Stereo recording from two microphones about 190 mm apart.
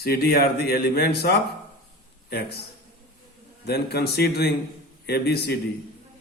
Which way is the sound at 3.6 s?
55° left (ahead or behind).